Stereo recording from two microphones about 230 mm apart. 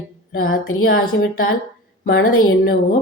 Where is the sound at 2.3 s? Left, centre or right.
Left.